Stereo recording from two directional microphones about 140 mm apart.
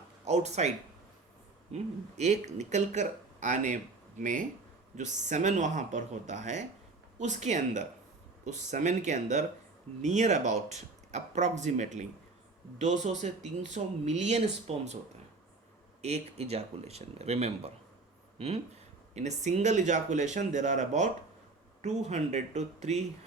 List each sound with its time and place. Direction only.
0.3 s speech: 50° right (ahead or behind)
1.7 s speech: 50° right (ahead or behind)
16.0 s speech: 50° right (ahead or behind)